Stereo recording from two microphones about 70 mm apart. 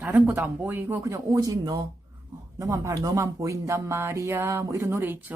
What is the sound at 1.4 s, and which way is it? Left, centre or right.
Speech, right.